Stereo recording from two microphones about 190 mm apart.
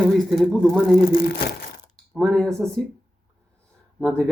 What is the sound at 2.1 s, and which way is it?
Speech, centre (ahead or behind).